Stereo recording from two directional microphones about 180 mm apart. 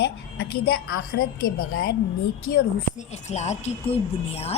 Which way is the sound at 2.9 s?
40° left (ahead or behind).